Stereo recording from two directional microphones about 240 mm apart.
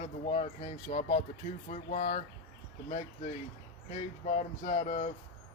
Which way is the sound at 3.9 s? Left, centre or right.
Left.